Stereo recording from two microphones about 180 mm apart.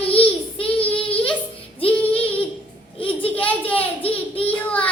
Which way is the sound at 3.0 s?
30° left (ahead or behind).